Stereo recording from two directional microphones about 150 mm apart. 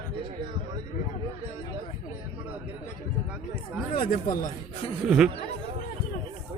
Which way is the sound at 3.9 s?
70° left (ahead or behind).